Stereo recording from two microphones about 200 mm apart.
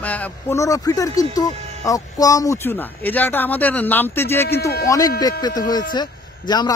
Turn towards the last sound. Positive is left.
turn(degrees=20)  # may be behind; listen again after turning